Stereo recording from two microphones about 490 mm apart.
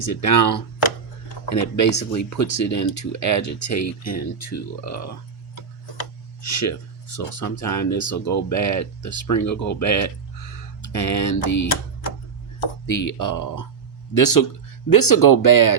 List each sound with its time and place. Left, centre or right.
0.0 s speech: left
7.3 s speech: left
12.9 s speech: left